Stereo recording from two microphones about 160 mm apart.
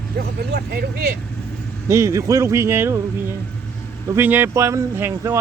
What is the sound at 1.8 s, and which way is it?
Speech, 20° right (ahead or behind).